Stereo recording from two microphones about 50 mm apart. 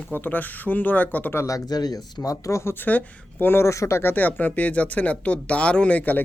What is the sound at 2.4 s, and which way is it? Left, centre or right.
Speech, left.